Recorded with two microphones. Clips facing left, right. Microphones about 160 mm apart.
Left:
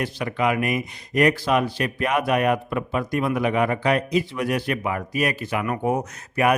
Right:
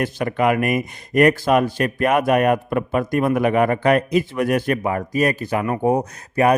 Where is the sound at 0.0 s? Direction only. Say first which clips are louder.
Right 4 dB; 50° right (ahead or behind).